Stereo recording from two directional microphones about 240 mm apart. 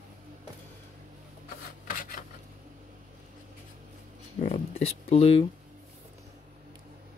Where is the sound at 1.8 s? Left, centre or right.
Left.